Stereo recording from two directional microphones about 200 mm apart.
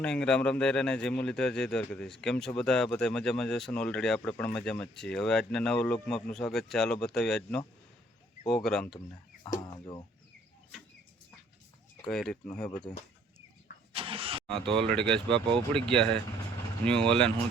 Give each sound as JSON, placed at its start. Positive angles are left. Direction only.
{"t": 0.0, "sound": "speech", "side_deg": 5}
{"t": 9.4, "sound": "a sound", "side_deg": 20}
{"t": 12.0, "sound": "speech", "side_deg": 0}
{"t": 13.9, "sound": "vehicle", "side_deg": -25}
{"t": 14.5, "sound": "speech", "side_deg": -25}
{"t": 14.9, "sound": "speech", "side_deg": 5}